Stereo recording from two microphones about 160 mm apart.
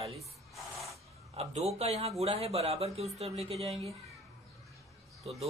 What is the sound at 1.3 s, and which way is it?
Speech, 40° right (ahead or behind).